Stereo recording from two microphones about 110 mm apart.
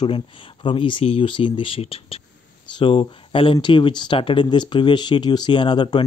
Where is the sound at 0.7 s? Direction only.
50° left (ahead or behind).